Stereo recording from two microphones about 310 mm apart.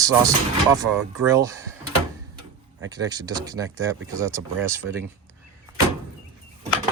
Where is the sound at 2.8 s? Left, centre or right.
Centre.